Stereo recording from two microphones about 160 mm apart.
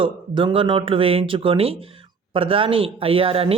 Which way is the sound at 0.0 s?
30° right (ahead or behind).